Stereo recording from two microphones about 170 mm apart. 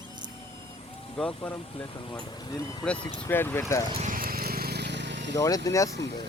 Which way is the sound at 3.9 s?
40° right (ahead or behind).